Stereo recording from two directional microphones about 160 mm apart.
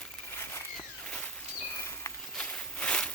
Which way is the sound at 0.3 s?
15° left (ahead or behind).